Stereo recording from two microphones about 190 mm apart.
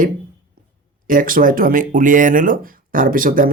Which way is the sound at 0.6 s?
50° right (ahead or behind).